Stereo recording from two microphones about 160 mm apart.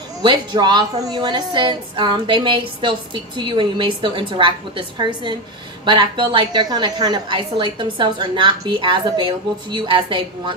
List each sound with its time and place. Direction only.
0.2 s a woman's voice: 30° right (ahead or behind)